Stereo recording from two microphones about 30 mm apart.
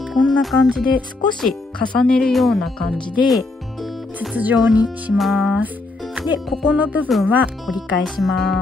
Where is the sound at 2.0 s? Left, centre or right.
Left.